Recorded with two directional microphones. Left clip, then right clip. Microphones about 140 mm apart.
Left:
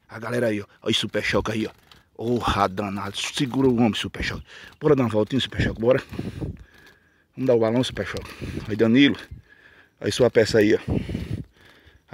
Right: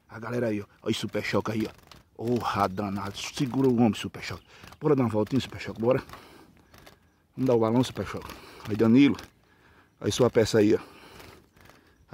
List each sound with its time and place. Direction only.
0.1 s speech: 20° left (ahead or behind)
7.3 s speech: 5° left (ahead or behind)